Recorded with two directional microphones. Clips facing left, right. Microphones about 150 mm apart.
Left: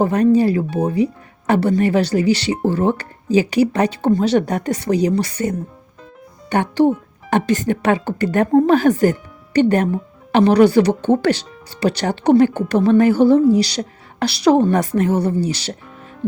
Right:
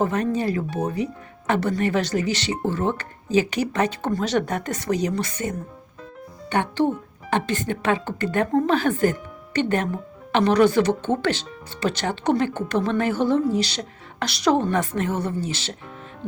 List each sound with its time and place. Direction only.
0.0 s speech: 35° left (ahead or behind)